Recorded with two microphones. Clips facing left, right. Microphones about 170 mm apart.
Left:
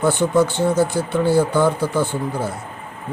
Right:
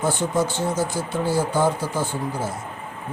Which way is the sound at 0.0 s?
60° left (ahead or behind).